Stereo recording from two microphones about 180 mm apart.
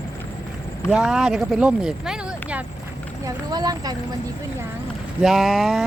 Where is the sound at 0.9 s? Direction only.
5° right (ahead or behind).